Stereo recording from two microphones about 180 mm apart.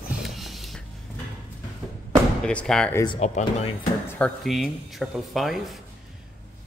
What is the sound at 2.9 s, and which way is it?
Speech, 25° left (ahead or behind).